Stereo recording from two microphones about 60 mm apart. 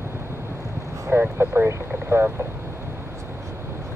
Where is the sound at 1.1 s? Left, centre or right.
Right.